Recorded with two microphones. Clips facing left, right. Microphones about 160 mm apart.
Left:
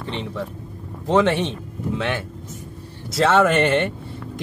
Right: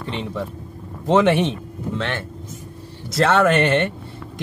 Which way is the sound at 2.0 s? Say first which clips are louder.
Even; 10° left (ahead or behind).